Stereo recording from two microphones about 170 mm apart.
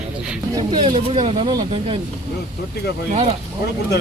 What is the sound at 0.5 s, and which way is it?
Speech, 25° right (ahead or behind).